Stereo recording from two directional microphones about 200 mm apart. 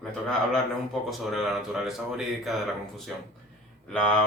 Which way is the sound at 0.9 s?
Centre (ahead or behind).